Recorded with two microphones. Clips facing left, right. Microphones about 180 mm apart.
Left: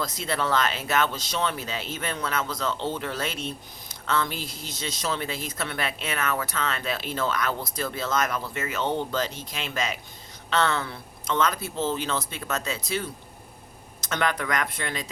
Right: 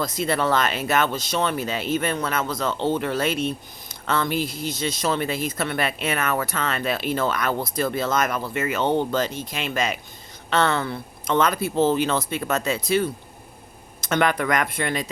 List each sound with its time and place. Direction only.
0.0 s speech: 55° right (ahead or behind)